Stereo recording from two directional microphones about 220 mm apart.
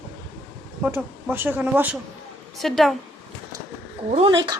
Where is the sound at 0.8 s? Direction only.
10° right (ahead or behind).